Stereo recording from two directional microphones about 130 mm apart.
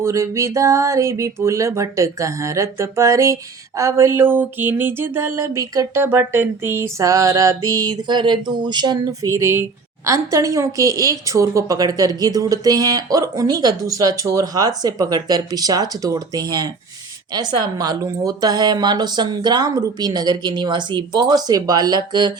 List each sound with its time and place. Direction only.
0.0 s a woman's voice: 20° right (ahead or behind)